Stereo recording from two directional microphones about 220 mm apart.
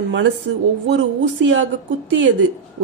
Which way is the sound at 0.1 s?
55° right (ahead or behind).